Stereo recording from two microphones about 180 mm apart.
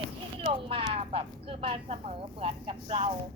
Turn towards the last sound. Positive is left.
turn(degrees=-30)  # may be behind; listen again after turning